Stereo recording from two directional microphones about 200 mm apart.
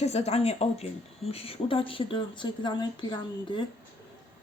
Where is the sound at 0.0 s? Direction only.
30° left (ahead or behind).